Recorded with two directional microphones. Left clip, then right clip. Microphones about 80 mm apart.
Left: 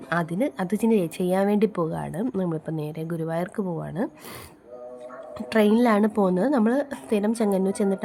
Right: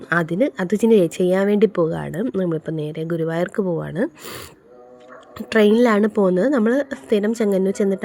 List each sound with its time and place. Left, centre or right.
0.1 s speech: right
0.9 s speech: right
5.5 s a woman's voice: right